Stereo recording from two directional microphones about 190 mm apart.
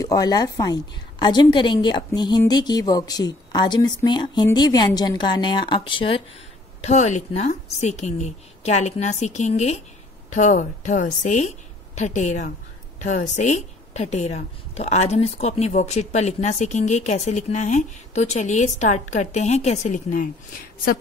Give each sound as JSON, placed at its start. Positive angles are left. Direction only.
{"t": 0.0, "sound": "a woman's voice", "side_deg": 20}
{"t": 6.8, "sound": "speech", "side_deg": 35}